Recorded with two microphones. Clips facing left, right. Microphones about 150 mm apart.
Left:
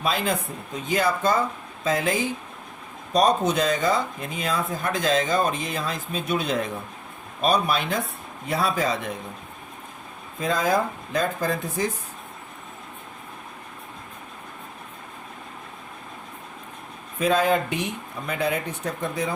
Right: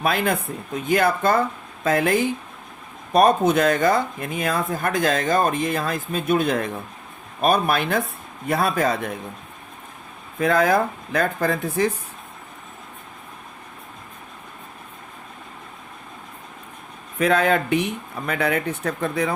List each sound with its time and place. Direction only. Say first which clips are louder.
0.0 s speech: right 3 dB; 60° right (ahead or behind)
10.4 s speech: right 4 dB; 60° right (ahead or behind)
17.2 s speech: right 2 dB; 60° right (ahead or behind)